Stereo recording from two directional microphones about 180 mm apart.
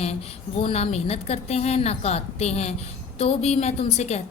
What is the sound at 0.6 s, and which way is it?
A woman's voice, 35° left (ahead or behind).